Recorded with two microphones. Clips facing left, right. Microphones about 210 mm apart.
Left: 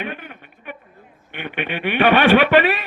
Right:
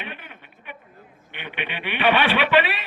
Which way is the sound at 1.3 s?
45° left (ahead or behind).